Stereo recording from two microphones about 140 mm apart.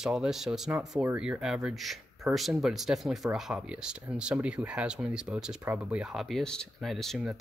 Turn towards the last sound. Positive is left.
turn(degrees=0)  # may be behind; listen again after turning